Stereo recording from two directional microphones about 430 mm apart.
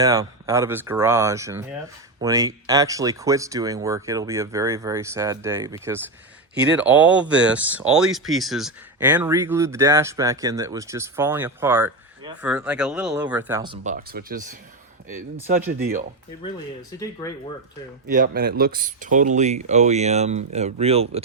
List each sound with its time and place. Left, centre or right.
0.0 s speech: centre
18.1 s speech: centre